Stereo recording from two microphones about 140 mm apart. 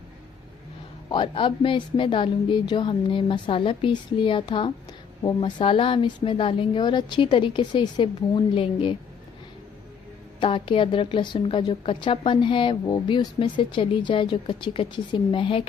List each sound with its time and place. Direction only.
1.1 s a woman's voice: 35° left (ahead or behind)
10.4 s a woman's voice: 40° left (ahead or behind)